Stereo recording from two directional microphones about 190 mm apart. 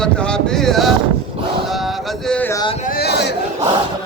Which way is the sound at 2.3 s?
10° left (ahead or behind).